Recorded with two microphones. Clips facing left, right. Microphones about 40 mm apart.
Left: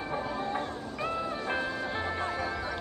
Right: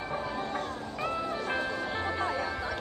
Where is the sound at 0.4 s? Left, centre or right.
Left.